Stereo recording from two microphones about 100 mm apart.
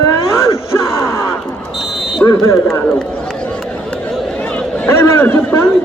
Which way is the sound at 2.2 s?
15° left (ahead or behind).